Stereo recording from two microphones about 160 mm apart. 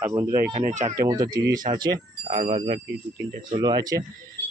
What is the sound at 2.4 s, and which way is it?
Speech, 35° right (ahead or behind).